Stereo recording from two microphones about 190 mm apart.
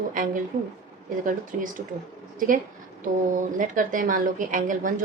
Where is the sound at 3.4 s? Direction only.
45° right (ahead or behind).